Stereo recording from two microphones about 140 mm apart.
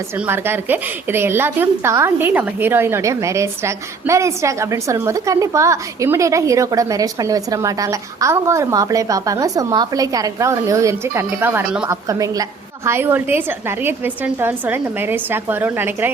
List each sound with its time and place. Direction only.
0.3 s a woman's voice: 15° right (ahead or behind)
11.9 s a woman's voice: 25° right (ahead or behind)